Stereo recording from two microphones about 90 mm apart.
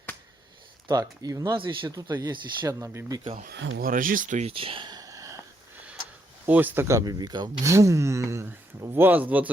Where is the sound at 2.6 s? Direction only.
35° right (ahead or behind).